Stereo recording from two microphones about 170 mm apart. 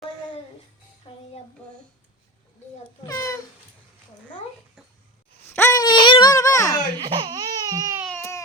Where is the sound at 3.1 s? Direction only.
20° left (ahead or behind).